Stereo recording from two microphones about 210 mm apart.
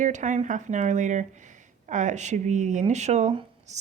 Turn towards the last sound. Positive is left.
turn(degrees=-30)  # may be behind; listen again after turning